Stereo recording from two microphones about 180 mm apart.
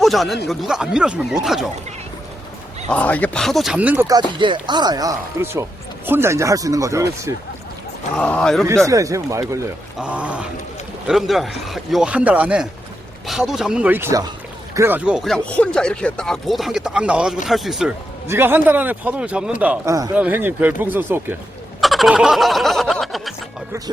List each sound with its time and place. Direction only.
0.0 s speech: centre (ahead or behind)
2.9 s a man's voice: 10° left (ahead or behind); by 7.3 s 15° right (ahead or behind)
8.1 s speech: 5° left (ahead or behind)
8.9 s a man's voice: 20° right (ahead or behind)
10.0 s a man's voice: 5° right (ahead or behind)
18.3 s a man's voice: 10° right (ahead or behind)
21.8 s snicker: centre (ahead or behind)